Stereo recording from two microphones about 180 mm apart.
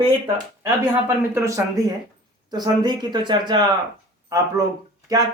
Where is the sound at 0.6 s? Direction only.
15° right (ahead or behind).